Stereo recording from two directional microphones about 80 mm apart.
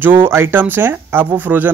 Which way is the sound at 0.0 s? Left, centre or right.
Right.